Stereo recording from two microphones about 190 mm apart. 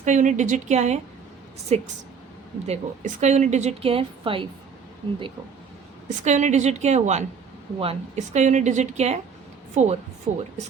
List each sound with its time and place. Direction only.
0.0 s a woman's voice: 40° right (ahead or behind)
6.2 s a woman's voice: 40° right (ahead or behind)